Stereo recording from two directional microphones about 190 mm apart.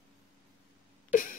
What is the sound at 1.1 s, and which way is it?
Cough, 45° left (ahead or behind).